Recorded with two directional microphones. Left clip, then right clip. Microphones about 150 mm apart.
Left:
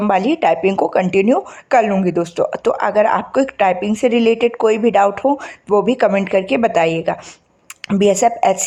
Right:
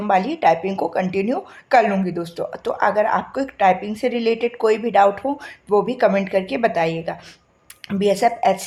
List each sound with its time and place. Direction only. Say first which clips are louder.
0.0 s speech: left 2 dB; 45° left (ahead or behind)